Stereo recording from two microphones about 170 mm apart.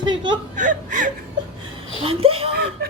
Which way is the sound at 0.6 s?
50° right (ahead or behind).